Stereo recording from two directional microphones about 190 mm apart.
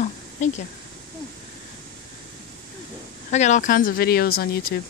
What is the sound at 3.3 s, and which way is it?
Speech, 40° left (ahead or behind).